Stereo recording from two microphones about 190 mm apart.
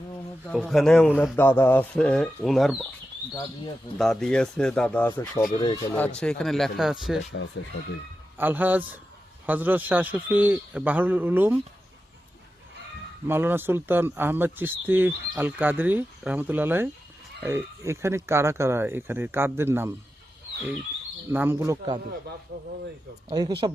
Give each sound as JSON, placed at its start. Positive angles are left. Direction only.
{"t": 0.5, "sound": "speech", "side_deg": 0}
{"t": 3.9, "sound": "speech", "side_deg": 0}
{"t": 6.1, "sound": "speech", "side_deg": 5}
{"t": 7.3, "sound": "speech", "side_deg": 75}
{"t": 8.4, "sound": "speech", "side_deg": -10}
{"t": 13.2, "sound": "speech", "side_deg": -10}
{"t": 21.3, "sound": "speech", "side_deg": -10}
{"t": 22.5, "sound": "speech", "side_deg": -65}
{"t": 23.3, "sound": "speech", "side_deg": -20}